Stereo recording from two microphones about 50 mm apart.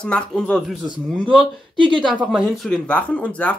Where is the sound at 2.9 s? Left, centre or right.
Left.